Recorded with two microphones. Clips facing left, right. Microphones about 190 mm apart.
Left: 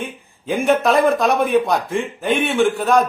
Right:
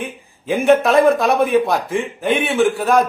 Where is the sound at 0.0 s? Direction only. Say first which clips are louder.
Right 1 dB; centre (ahead or behind).